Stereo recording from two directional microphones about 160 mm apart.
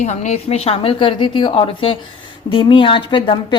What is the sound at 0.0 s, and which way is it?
Speech, 45° left (ahead or behind).